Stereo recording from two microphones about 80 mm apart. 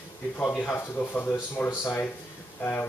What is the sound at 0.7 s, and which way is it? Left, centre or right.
Speech, left.